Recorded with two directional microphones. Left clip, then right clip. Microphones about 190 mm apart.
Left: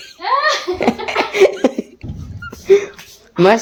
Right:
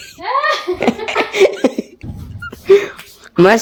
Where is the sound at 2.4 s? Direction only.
10° right (ahead or behind).